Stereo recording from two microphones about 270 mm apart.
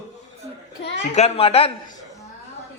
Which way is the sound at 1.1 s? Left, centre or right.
Left.